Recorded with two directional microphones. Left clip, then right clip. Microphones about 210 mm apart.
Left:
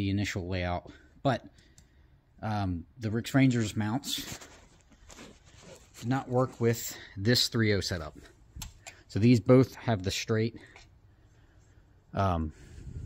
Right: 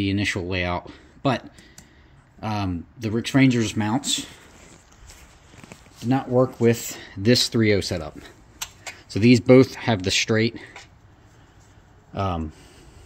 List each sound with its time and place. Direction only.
0.0 s speech: 15° left (ahead or behind)
2.4 s speech: 20° left (ahead or behind)
6.4 s speech: 5° left (ahead or behind)
9.1 s speech: 15° left (ahead or behind)
12.1 s speech: 30° left (ahead or behind)